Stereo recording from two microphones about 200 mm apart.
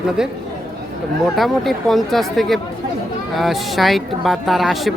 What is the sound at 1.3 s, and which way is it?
A woman's voice, centre (ahead or behind).